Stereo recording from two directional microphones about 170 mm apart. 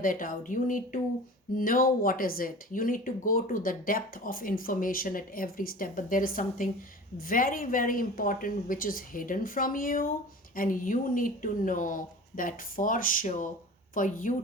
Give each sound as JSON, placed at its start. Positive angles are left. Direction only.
{"t": 0.0, "sound": "speech", "side_deg": 55}